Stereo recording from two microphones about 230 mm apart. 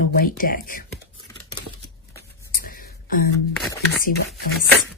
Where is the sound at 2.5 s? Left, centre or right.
Left.